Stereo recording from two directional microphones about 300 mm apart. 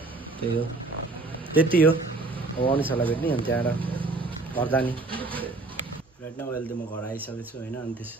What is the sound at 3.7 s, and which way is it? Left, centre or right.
Vehicle, centre.